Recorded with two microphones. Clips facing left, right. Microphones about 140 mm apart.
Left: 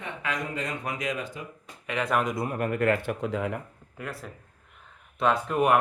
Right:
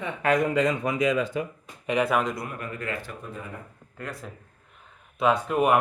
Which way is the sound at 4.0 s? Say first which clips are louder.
Even; 10° left (ahead or behind).